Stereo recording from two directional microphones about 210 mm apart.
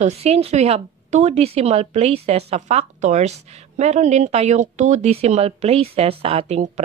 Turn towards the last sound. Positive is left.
turn(degrees=-30)  # may be behind; listen again after turning